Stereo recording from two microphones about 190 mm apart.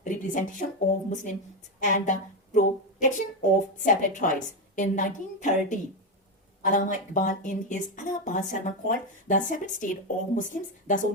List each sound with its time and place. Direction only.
0.0 s a woman's voice: 45° left (ahead or behind)